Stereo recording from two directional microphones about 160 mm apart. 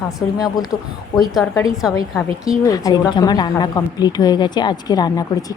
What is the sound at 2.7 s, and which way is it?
A woman's voice, 20° left (ahead or behind).